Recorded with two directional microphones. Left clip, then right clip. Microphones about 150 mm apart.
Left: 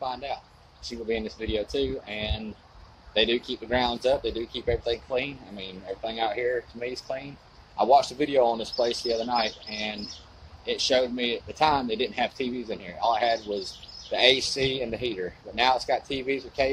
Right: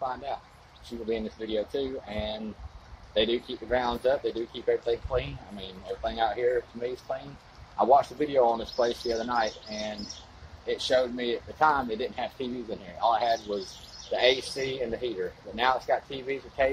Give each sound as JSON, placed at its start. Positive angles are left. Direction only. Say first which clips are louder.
{"t": 1.0, "sound": "speech", "louder": "left 2 dB", "side_deg": 25}